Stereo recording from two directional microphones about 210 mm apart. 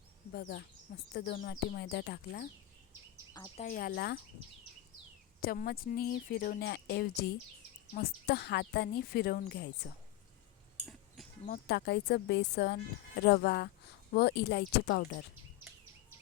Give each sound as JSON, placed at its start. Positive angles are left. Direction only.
{"t": 0.3, "sound": "speech", "side_deg": 50}
{"t": 3.6, "sound": "speech", "side_deg": 40}
{"t": 5.4, "sound": "speech", "side_deg": 45}
{"t": 11.4, "sound": "speech", "side_deg": 45}